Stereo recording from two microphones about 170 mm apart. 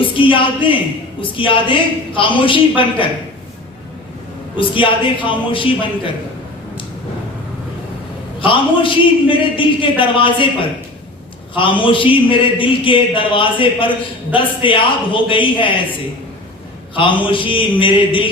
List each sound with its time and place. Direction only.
0.0 s a man's voice: 30° left (ahead or behind)
4.5 s a man's voice: 30° left (ahead or behind)
8.4 s a man's voice: 30° left (ahead or behind)
11.5 s a man's voice: 30° left (ahead or behind)
16.9 s a man's voice: 30° left (ahead or behind)